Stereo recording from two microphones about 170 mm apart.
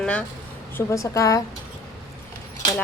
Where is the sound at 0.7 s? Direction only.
15° left (ahead or behind).